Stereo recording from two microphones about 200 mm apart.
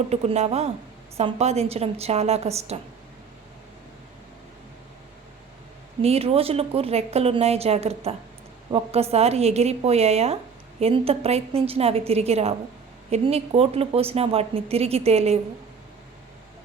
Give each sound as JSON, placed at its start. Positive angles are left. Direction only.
{"t": 0.1, "sound": "speech", "side_deg": -35}
{"t": 6.0, "sound": "speech", "side_deg": -30}